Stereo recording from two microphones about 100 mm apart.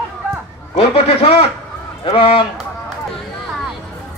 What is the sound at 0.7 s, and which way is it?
Speech, 90° left.